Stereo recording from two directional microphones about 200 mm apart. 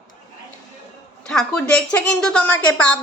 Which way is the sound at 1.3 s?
5° left (ahead or behind).